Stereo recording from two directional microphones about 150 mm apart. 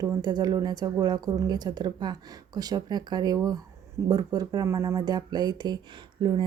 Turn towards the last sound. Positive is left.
turn(degrees=-30)  # may be behind; listen again after turning